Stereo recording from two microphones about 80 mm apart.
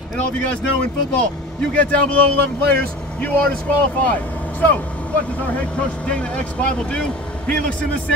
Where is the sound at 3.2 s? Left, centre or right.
Centre.